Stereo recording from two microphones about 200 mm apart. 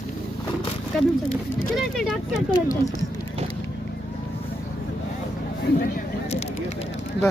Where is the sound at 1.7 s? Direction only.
Centre (ahead or behind).